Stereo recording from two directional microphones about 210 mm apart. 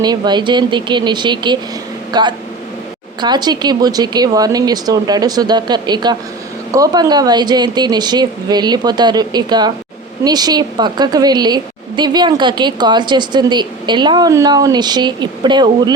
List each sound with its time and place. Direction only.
0.0 s a woman's voice: 20° right (ahead or behind)